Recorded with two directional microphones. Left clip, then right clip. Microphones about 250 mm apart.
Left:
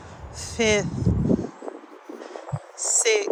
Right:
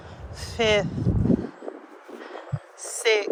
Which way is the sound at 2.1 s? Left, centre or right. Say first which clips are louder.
Left 1 dB; left.